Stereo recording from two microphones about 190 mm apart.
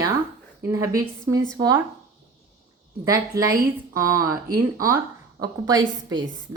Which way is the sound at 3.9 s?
15° right (ahead or behind).